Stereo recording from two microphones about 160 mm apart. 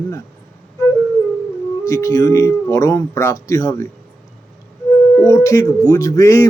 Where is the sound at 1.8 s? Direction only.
20° left (ahead or behind).